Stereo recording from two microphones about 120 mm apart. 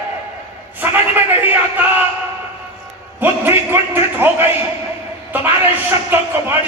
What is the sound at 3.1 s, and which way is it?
A man's voice, 15° right (ahead or behind).